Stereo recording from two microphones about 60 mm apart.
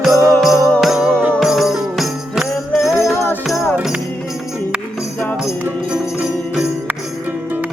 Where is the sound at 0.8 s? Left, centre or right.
Centre.